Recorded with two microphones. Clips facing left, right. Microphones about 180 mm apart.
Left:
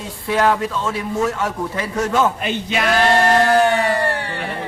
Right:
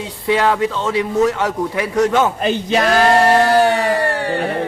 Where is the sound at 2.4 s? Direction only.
40° right (ahead or behind).